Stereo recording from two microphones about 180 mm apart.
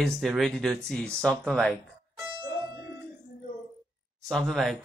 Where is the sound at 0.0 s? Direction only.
Centre (ahead or behind).